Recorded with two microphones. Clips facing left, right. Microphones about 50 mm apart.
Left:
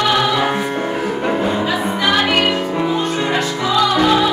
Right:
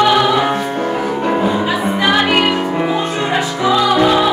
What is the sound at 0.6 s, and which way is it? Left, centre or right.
Music, centre.